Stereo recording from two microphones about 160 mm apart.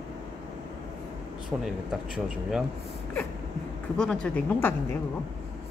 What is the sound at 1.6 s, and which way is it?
Speech, 5° right (ahead or behind).